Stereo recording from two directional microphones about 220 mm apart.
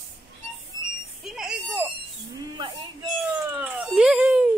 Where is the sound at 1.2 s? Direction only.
Centre (ahead or behind).